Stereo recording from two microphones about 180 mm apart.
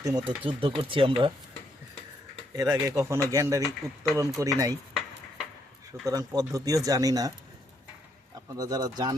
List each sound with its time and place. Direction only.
0.0 s speech: 20° right (ahead or behind)
2.6 s speech: 20° right (ahead or behind)
6.1 s speech: 20° right (ahead or behind)
8.5 s speech: 20° right (ahead or behind)